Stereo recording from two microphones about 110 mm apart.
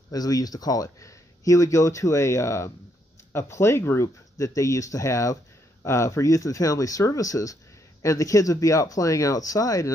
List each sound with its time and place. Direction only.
0.1 s speech: 35° left (ahead or behind)